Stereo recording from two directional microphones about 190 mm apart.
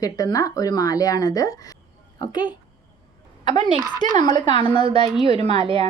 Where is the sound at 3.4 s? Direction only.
40° right (ahead or behind).